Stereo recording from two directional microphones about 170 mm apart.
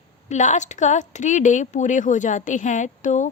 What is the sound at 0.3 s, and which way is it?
A woman's voice, 45° left (ahead or behind).